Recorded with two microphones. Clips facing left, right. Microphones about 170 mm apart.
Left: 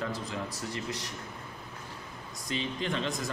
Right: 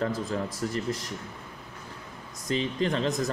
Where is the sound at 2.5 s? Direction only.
35° right (ahead or behind).